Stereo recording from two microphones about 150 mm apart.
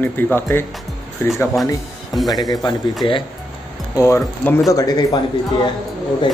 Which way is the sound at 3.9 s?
15° left (ahead or behind).